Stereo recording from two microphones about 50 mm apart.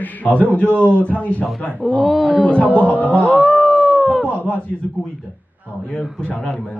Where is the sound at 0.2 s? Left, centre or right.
Left.